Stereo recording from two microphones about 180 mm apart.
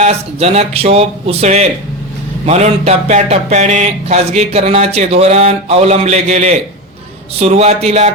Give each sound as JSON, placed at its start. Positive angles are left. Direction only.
{"t": 0.0, "sound": "speech", "side_deg": -35}